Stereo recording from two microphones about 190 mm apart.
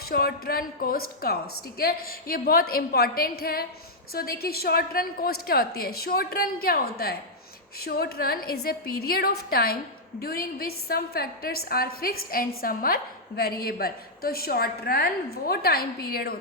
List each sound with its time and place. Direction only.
0.1 s a woman's voice: 50° left (ahead or behind)